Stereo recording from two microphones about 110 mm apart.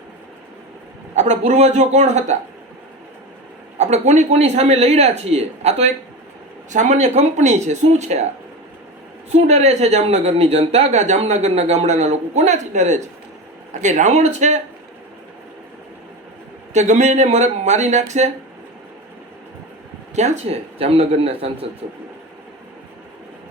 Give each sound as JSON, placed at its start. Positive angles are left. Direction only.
{"t": 1.1, "sound": "speech", "side_deg": -90}
{"t": 3.8, "sound": "speech", "side_deg": -85}
{"t": 6.7, "sound": "speech", "side_deg": -90}
{"t": 9.3, "sound": "speech", "side_deg": -80}
{"t": 16.7, "sound": "speech", "side_deg": -90}
{"t": 20.1, "sound": "speech", "side_deg": -90}